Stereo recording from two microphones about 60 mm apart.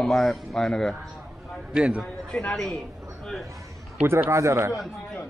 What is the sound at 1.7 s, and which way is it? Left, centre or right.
Speech, centre.